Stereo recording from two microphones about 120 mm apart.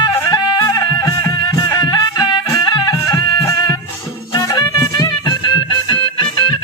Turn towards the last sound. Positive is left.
turn(degrees=40)  # may be behind; listen again after turning